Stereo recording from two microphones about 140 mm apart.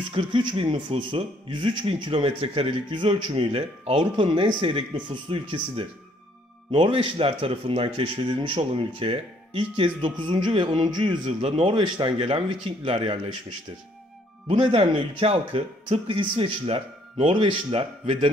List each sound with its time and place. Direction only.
0.1 s speech: 35° right (ahead or behind)
11.2 s a man's voice: 50° right (ahead or behind)
11.6 s speech: 35° right (ahead or behind)
14.5 s speech: 35° right (ahead or behind)